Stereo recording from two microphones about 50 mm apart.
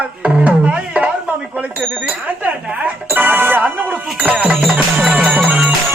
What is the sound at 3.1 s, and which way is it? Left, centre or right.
Speech, right.